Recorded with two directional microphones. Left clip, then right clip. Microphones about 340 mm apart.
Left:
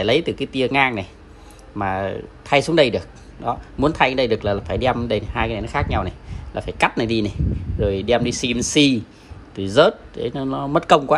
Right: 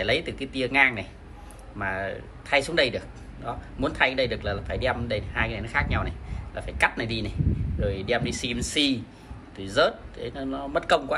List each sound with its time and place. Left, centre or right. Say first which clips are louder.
0.0 s a man's voice: left 7 dB; centre